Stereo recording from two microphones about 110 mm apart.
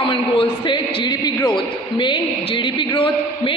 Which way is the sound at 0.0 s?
50° left (ahead or behind).